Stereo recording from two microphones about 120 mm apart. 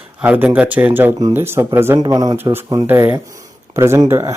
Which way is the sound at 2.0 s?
30° right (ahead or behind).